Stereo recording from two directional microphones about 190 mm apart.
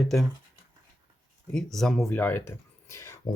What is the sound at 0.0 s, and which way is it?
Speech, centre (ahead or behind).